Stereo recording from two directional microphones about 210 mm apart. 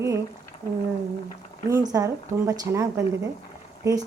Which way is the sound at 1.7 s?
15° right (ahead or behind).